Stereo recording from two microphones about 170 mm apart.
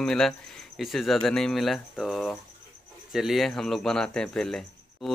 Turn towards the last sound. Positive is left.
turn(degrees=0)  # may be behind; listen again after turning